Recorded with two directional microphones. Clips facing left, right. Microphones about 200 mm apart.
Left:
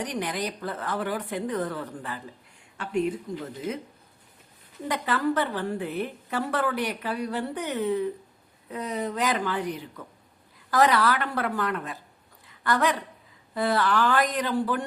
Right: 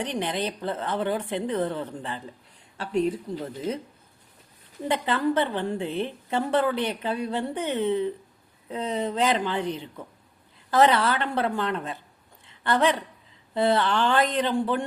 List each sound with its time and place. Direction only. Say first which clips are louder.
0.0 s a woman's voice: right 2 dB; 25° right (ahead or behind)
4.9 s a woman's voice: right 2 dB; 25° right (ahead or behind)
12.5 s a sound: right 2 dB; 25° right (ahead or behind)
13.5 s a woman's voice: right 2 dB; 25° right (ahead or behind)